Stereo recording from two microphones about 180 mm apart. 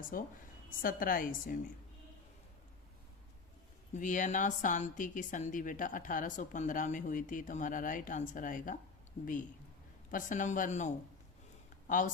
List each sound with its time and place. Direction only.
0.1 s a woman's voice: 55° left (ahead or behind)
3.9 s a woman's voice: 45° left (ahead or behind)